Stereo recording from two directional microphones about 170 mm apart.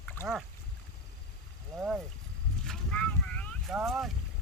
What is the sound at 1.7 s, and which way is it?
Speech, centre (ahead or behind).